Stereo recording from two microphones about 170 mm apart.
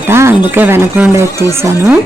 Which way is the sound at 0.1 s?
15° right (ahead or behind).